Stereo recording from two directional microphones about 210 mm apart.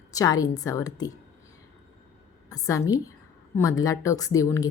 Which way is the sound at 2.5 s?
15° left (ahead or behind).